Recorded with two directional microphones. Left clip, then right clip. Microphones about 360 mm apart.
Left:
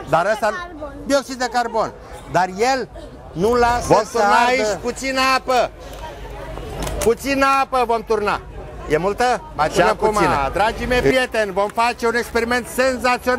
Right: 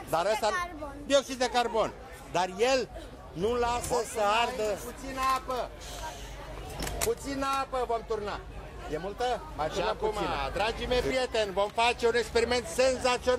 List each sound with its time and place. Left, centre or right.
0.1 s speech: left
5.1 s a man's voice: left
7.1 s speech: left